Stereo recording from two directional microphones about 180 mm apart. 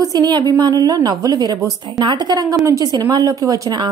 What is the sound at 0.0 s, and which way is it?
A woman's voice, 20° right (ahead or behind).